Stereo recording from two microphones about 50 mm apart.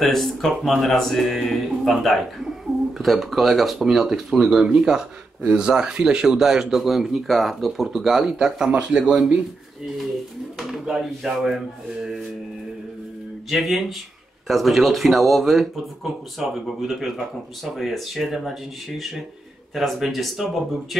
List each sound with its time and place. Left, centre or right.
0.0 s speech: centre
5.5 s speech: centre
10.6 s speech: centre
13.5 s speech: centre